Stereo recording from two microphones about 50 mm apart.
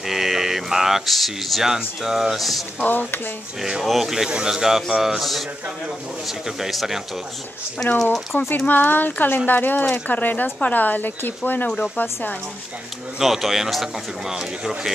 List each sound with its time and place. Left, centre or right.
0.1 s speech: centre
2.9 s speech: left
3.8 s speech: centre
6.6 s speech: centre
8.0 s speech: centre
8.4 s speech: left
13.2 s speech: centre
14.3 s speech: centre